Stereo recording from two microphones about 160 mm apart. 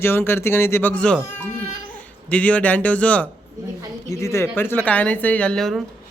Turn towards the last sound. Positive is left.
turn(degrees=0)  # may be behind; listen again after turning